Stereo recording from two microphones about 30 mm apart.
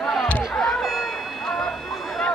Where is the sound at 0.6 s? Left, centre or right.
Centre.